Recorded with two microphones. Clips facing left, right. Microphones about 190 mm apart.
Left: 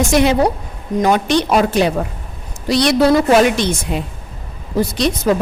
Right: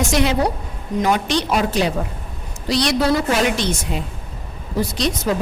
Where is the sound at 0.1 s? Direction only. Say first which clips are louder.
Left 5 dB; 55° left (ahead or behind).